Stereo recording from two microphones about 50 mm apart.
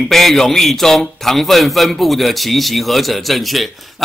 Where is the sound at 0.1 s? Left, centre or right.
Centre.